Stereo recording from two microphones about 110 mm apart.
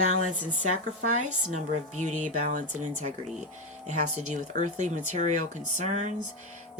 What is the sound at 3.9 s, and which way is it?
Speech, 90° right.